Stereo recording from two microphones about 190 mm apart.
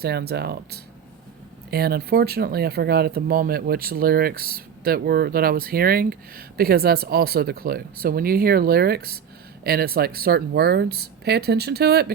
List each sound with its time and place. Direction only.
0.0 s speech: 55° right (ahead or behind)